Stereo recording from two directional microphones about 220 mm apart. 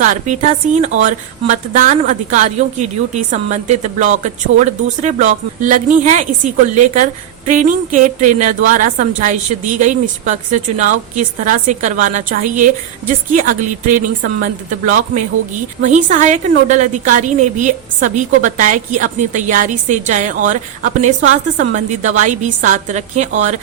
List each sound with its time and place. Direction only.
0.0 s a woman's voice: 35° right (ahead or behind)
14.7 s a woman's voice: 35° right (ahead or behind)